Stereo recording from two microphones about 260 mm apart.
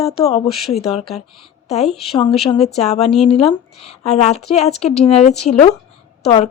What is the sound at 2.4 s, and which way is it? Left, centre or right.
Speech, left.